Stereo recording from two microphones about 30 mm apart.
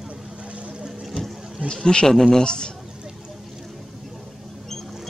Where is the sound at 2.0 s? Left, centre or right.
Centre.